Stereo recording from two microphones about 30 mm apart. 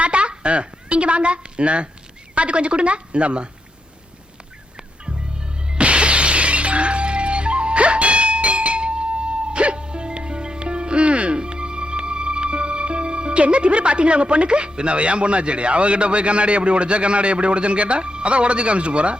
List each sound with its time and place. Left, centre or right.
0.0 s a woman's voice: right
5.6 s music: right